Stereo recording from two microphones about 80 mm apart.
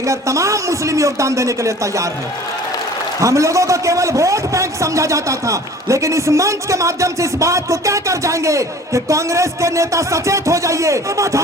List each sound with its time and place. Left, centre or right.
0.0 s a man's voice: right
3.2 s a man's voice: right